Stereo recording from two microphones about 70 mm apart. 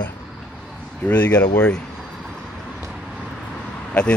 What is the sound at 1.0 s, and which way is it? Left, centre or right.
Speech, left.